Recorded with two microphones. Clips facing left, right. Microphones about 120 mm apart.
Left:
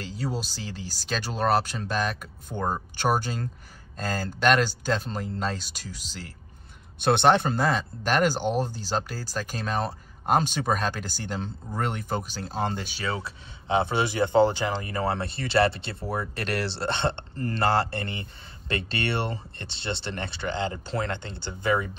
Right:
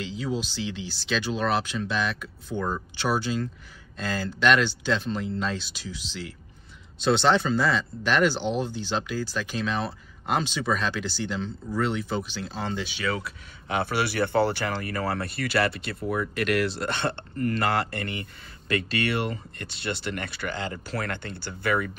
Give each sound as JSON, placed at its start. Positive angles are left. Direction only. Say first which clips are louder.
{"t": 0.0, "sound": "speech", "louder": "right 2 dB", "side_deg": 40}
{"t": 7.0, "sound": "speech", "louder": "left 1 dB", "side_deg": 55}
{"t": 13.0, "sound": "speech", "louder": "right 1 dB", "side_deg": 30}